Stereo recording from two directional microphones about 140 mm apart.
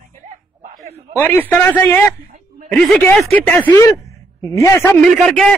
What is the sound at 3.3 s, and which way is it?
A man's voice, 10° left (ahead or behind).